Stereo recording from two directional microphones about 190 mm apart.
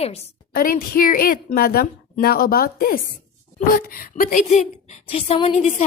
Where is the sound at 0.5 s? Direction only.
50° left (ahead or behind).